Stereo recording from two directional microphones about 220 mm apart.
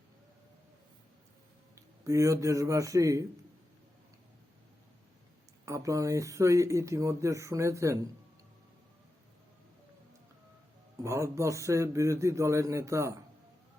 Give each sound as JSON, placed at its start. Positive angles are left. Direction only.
{"t": 1.7, "sound": "a man's voice", "side_deg": -15}
{"t": 5.6, "sound": "speech", "side_deg": -15}
{"t": 11.0, "sound": "speech", "side_deg": -15}